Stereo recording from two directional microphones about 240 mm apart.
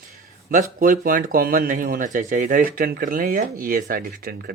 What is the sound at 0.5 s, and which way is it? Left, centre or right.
Speech, right.